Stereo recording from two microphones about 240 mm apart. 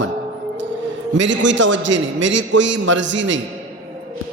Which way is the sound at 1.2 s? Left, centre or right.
Right.